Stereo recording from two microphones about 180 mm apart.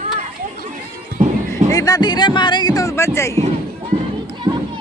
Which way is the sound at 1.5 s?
20° left (ahead or behind).